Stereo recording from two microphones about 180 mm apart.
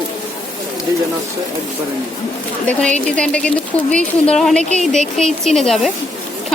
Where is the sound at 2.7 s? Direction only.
5° left (ahead or behind).